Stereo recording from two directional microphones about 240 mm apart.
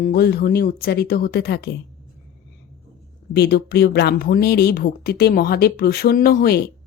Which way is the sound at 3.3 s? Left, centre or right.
Left.